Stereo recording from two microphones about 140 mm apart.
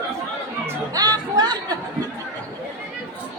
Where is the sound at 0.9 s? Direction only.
25° right (ahead or behind).